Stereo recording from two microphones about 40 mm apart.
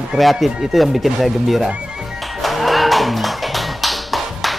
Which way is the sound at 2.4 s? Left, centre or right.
Centre.